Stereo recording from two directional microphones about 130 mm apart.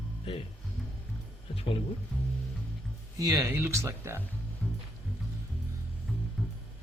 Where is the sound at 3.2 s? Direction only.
25° right (ahead or behind).